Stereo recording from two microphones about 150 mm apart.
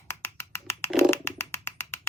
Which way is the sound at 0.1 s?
15° left (ahead or behind).